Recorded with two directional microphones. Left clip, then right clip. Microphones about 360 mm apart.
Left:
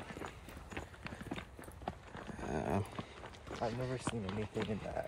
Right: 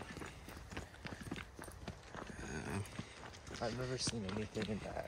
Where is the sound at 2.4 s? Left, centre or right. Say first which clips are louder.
Left 10 dB; centre.